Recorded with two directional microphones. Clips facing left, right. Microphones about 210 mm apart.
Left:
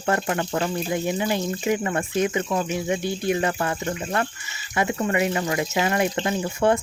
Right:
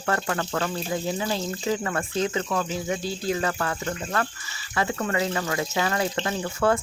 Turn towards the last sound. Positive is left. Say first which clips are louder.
# left 2 dB
turn(degrees=20)  # may be behind; listen again after turning